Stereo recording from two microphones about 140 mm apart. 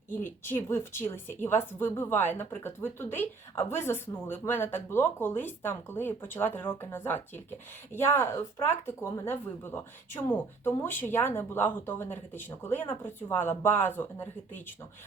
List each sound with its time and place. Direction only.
0.1 s speech: 15° left (ahead or behind)